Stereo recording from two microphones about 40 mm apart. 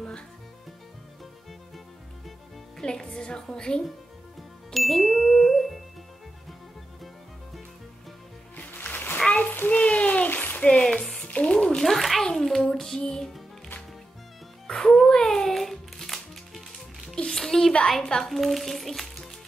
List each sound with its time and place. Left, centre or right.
2.8 s a woman's voice: centre
4.7 s music: centre
8.5 s music: left
9.7 s a sound: left
10.7 s music: centre
11.3 s music: left
11.8 s a sound: centre
12.6 s female singing: centre
14.7 s music: centre
17.3 s a sound: centre
18.0 s a child's voice: centre
18.3 s music: centre